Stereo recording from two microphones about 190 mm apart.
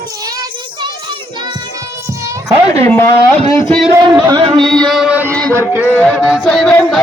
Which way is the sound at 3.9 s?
20° right (ahead or behind).